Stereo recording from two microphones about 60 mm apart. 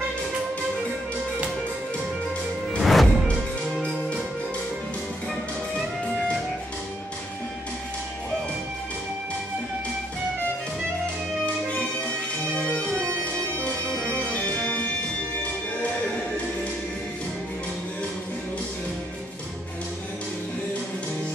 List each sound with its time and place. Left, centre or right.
2.8 s music: centre
12.5 s music: centre
14.1 s music: left